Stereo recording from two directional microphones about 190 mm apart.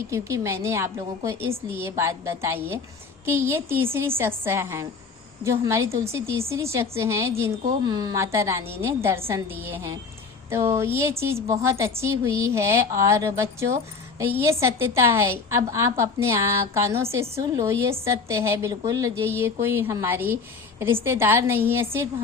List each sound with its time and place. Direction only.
0.1 s a woman's voice: 15° right (ahead or behind)